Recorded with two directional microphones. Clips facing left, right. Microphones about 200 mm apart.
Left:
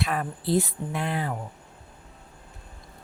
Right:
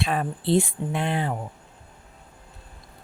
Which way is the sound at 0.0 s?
25° right (ahead or behind).